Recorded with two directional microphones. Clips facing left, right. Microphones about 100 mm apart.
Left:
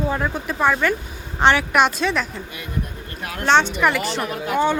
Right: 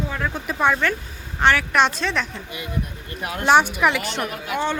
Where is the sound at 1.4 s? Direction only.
20° left (ahead or behind).